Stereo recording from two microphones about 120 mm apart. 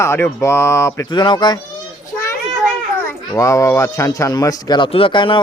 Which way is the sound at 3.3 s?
25° left (ahead or behind).